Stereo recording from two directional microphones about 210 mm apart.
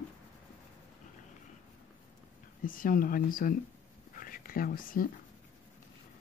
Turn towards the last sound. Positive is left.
turn(degrees=40)  # may be behind; listen again after turning